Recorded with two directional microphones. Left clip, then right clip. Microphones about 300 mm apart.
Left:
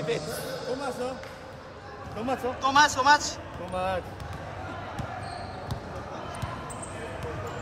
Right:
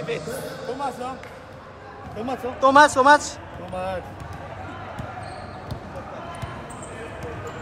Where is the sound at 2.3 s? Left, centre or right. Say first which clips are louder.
Right 7 dB; centre.